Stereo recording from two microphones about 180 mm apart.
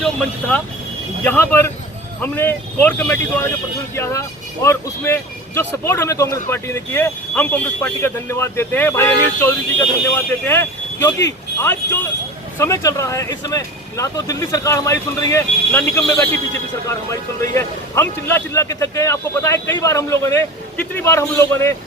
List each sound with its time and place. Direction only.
0.0 s a man's voice: 5° left (ahead or behind)